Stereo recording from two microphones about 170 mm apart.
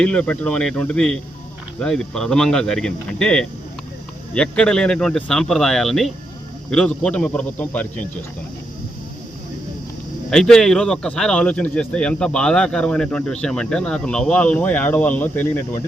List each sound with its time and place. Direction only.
0.0 s a man's voice: 5° left (ahead or behind)
10.2 s speech: 5° left (ahead or behind)